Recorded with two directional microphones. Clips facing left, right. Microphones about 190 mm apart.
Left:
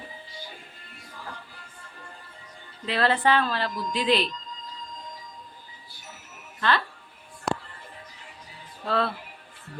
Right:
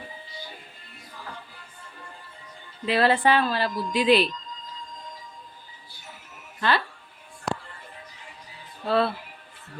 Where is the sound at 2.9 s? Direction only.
10° right (ahead or behind).